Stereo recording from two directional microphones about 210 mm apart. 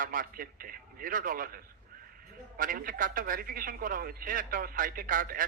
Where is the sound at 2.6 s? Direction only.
40° right (ahead or behind).